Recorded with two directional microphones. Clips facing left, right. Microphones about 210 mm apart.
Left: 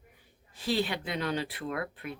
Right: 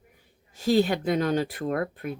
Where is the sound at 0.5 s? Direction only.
45° right (ahead or behind).